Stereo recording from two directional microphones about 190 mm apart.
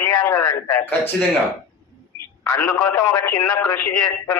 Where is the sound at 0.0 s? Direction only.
10° left (ahead or behind).